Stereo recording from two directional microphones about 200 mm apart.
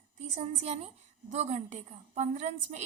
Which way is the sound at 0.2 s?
30° right (ahead or behind).